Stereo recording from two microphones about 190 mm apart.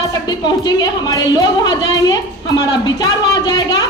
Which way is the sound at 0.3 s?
20° left (ahead or behind).